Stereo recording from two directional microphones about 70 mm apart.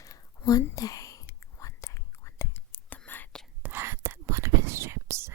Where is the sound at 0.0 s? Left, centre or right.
Left.